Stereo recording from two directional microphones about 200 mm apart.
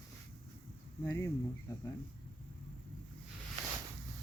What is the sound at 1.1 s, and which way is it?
Speech, 15° left (ahead or behind).